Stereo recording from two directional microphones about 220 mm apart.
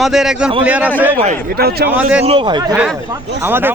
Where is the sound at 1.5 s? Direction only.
45° right (ahead or behind).